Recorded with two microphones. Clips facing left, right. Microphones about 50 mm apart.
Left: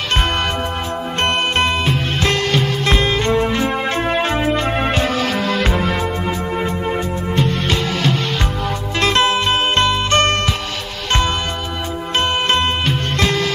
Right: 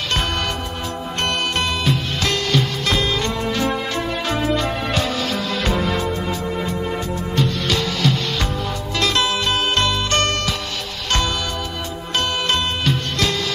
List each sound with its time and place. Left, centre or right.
1.2 s music: left
12.2 s music: left